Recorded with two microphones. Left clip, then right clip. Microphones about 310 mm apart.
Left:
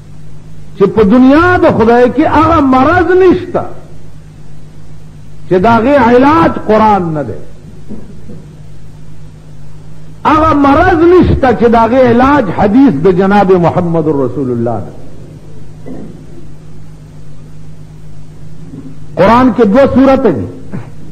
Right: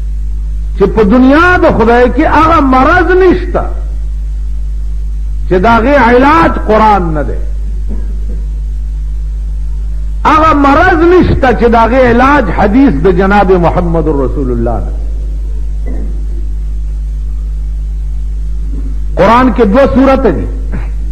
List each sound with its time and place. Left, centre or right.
0.7 s a man's voice: right
5.5 s a man's voice: right
10.2 s a sound: right
11.2 s a man's voice: right
19.1 s a man's voice: right